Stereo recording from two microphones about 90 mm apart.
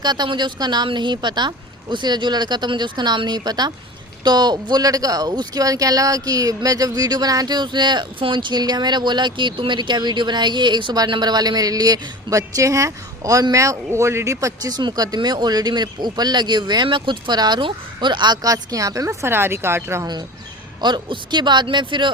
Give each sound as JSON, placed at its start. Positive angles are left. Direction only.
{"t": 0.0, "sound": "speech", "side_deg": -55}
{"t": 14.8, "sound": "speech", "side_deg": -50}
{"t": 20.8, "sound": "speech", "side_deg": -55}